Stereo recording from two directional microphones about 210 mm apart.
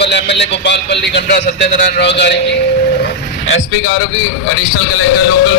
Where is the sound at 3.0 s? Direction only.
65° left (ahead or behind).